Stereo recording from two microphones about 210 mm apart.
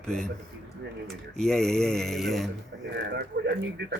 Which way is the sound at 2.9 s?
55° right (ahead or behind).